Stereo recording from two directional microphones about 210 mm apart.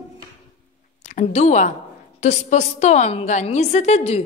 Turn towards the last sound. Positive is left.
turn(degrees=30)  # may be behind; listen again after turning